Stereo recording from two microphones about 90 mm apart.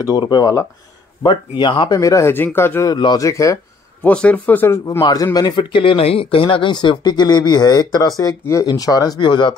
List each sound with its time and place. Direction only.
0.1 s speech: 55° left (ahead or behind)
1.6 s speech: 60° left (ahead or behind)
1.9 s speech: 35° left (ahead or behind)
2.3 s a man's voice: 25° left (ahead or behind)
2.9 s speech: 50° left (ahead or behind)
4.0 s a man's voice: 15° left (ahead or behind)
5.1 s speech: 40° left (ahead or behind)
5.6 s speech: 70° left (ahead or behind)